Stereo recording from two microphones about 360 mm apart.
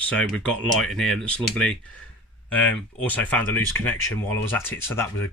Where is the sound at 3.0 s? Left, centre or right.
Centre.